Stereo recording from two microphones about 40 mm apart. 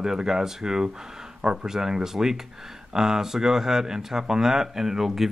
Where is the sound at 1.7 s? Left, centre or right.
Centre.